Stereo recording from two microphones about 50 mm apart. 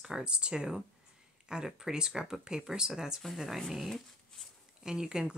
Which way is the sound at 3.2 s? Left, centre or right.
Centre.